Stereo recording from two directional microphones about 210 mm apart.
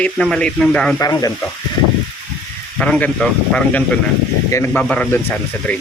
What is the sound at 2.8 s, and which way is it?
Speech, 5° left (ahead or behind).